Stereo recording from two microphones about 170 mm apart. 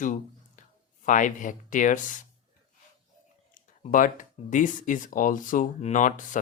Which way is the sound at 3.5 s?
50° left (ahead or behind).